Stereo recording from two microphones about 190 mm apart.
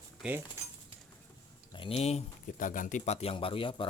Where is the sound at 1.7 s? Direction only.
30° left (ahead or behind).